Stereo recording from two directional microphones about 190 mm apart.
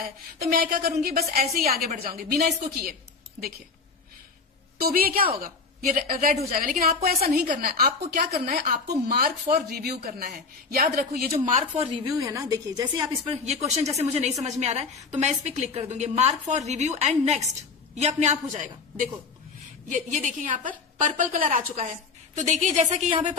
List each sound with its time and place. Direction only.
0.3 s a woman's voice: 50° right (ahead or behind)
4.8 s a woman's voice: 50° right (ahead or behind)
11.3 s a woman's voice: 35° right (ahead or behind)
11.9 s a woman's voice: 20° right (ahead or behind); by 23.2 s 35° right (ahead or behind)